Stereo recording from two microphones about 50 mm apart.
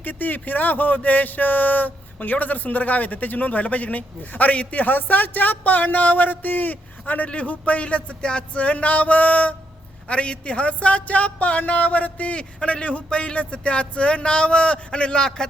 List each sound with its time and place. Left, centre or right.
0.0 s speech: left; by 15.4 s centre